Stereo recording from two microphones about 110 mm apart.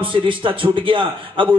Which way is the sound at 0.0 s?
50° right (ahead or behind).